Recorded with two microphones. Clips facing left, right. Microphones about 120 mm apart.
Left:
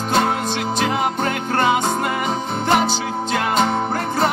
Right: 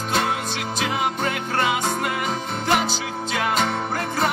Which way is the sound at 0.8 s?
40° left (ahead or behind).